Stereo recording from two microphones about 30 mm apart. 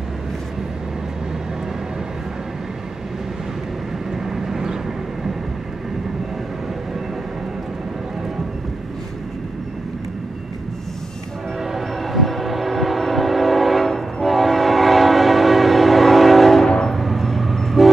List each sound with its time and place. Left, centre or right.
4.4 s vehicle: centre
11.7 s train: centre
16.6 s train: left
17.0 s vehicle: centre